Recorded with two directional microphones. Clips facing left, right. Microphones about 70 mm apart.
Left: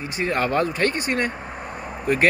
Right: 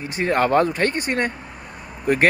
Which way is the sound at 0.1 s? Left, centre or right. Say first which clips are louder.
Right 4 dB; right.